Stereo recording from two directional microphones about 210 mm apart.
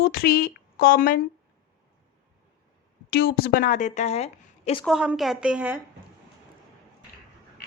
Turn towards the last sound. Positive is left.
turn(degrees=-5)  # may be behind; listen again after turning